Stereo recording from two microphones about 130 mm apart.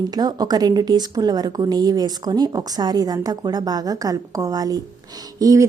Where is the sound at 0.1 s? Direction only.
30° right (ahead or behind).